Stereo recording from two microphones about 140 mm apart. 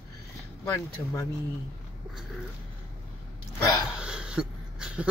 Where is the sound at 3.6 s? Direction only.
25° left (ahead or behind).